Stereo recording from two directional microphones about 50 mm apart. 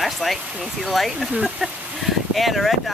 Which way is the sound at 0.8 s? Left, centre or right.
Centre.